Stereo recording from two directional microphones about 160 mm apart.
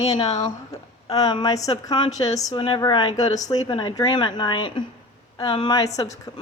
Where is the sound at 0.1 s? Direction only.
25° left (ahead or behind).